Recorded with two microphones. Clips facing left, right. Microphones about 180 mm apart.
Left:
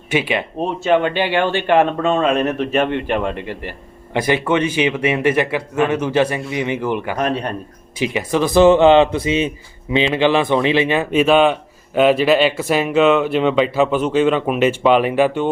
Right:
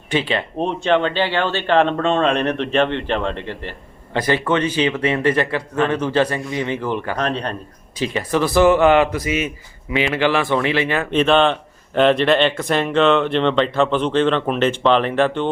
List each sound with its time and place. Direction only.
0.1 s speech: 10° left (ahead or behind)
11.0 s speech: 5° left (ahead or behind)